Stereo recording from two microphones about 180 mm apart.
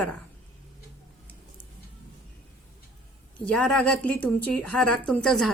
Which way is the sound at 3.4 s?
5° left (ahead or behind).